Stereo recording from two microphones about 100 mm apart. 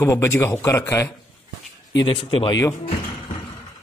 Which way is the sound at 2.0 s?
55° left (ahead or behind).